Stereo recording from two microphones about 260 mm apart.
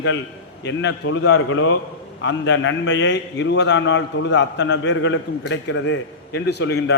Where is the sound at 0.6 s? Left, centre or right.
Left.